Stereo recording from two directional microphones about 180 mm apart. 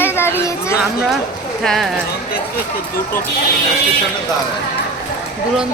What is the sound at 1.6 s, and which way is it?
Speech, centre (ahead or behind).